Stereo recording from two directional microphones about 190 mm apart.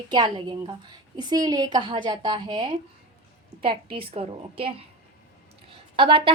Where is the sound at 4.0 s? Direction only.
30° right (ahead or behind).